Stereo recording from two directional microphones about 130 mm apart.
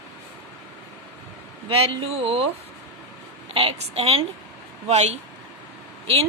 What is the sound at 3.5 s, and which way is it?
Speech, 50° right (ahead or behind).